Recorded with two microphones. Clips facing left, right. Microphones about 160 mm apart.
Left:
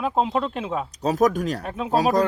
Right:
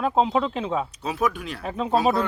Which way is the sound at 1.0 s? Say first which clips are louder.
Left 6 dB; 40° left (ahead or behind).